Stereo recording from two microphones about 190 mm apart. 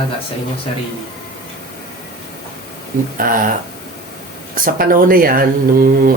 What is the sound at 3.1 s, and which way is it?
Speech, 45° right (ahead or behind).